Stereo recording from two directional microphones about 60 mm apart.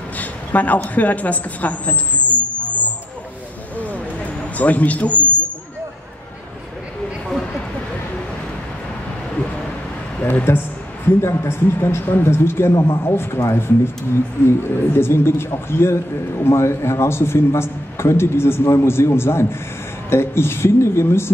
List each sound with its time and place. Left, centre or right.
0.2 s a sound: left
0.8 s a woman's voice: left
3.7 s a sound: left
4.6 s speech: left
10.2 s a man's voice: left
12.7 s a man's voice: left
13.0 s a man's voice: left